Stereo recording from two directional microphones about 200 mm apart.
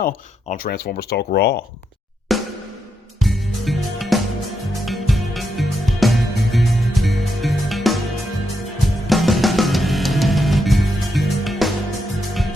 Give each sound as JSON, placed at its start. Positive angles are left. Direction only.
{"t": 0.0, "sound": "speech", "side_deg": 45}
{"t": 2.3, "sound": "snare drum", "side_deg": 0}
{"t": 3.2, "sound": "music", "side_deg": 0}
{"t": 9.0, "sound": "music", "side_deg": 0}